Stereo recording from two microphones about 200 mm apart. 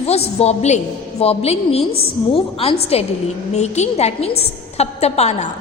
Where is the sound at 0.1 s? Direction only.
30° left (ahead or behind).